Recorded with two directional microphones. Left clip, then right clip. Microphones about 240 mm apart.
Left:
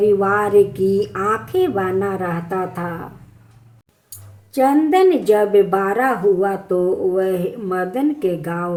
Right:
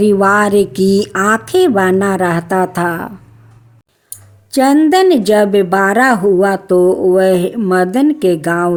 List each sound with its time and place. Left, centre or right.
0.0 s speech: right
4.5 s speech: right